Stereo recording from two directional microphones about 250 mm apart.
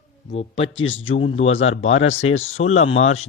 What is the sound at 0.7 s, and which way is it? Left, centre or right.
Speech, left.